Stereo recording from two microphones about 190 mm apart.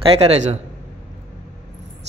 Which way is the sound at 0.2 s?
35° right (ahead or behind).